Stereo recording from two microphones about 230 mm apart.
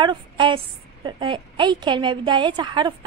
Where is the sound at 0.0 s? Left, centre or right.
Right.